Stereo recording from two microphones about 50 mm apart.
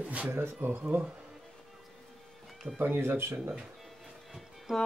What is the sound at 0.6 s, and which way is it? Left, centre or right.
Speech, right.